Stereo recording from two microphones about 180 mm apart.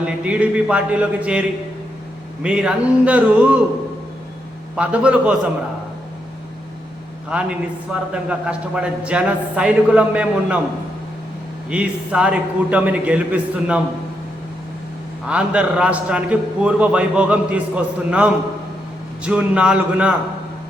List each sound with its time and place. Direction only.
0.0 s a man's voice: 5° right (ahead or behind)
4.8 s a man's voice: 5° right (ahead or behind)
7.3 s a man's voice: 5° right (ahead or behind)
11.7 s a man's voice: 5° right (ahead or behind)
15.3 s a man's voice: 5° right (ahead or behind)